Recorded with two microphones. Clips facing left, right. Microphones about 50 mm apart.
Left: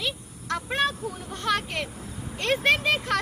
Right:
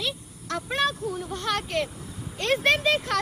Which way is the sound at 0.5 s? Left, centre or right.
Centre.